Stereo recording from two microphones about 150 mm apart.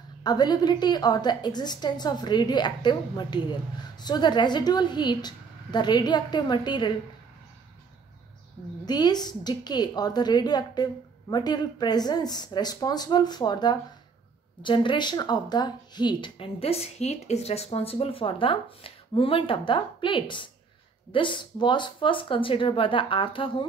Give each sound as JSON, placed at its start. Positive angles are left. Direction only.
{"t": 0.2, "sound": "a woman's voice", "side_deg": 30}
{"t": 8.8, "sound": "a woman's voice", "side_deg": 30}